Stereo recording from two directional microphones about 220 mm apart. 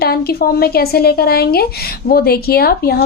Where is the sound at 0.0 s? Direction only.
45° left (ahead or behind).